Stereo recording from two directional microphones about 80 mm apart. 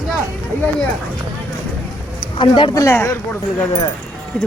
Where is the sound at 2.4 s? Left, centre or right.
Left.